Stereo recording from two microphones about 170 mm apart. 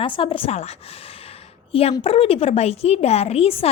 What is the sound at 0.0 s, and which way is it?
Speech, 30° left (ahead or behind).